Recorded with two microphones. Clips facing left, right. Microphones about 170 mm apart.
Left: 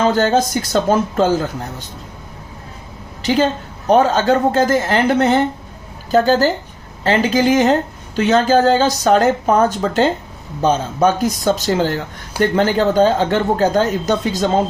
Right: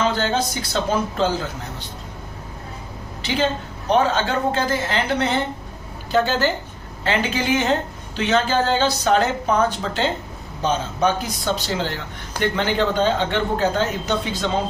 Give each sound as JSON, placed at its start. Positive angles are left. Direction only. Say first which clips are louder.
{"t": 0.0, "sound": "a woman's voice", "louder": "left 6 dB", "side_deg": 45}
{"t": 3.2, "sound": "a woman's voice", "louder": "left 6 dB", "side_deg": 40}